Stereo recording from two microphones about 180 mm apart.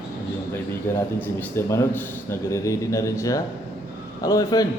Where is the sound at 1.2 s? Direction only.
15° left (ahead or behind).